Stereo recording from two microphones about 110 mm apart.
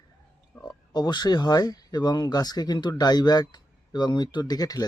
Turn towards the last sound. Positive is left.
turn(degrees=35)  # may be behind; listen again after turning